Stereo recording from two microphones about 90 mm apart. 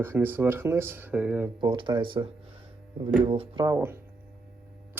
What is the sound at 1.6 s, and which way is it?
Speech, 60° right (ahead or behind).